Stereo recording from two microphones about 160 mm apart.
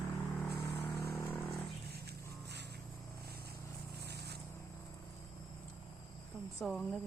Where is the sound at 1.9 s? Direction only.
90° right.